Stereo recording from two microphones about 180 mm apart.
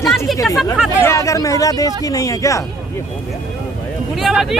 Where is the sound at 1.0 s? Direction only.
15° left (ahead or behind).